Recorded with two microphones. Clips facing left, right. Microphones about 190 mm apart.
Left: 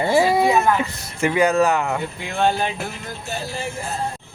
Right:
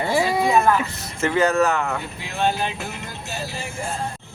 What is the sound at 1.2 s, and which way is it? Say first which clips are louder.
Speech: left 2 dB; 15° left (ahead or behind).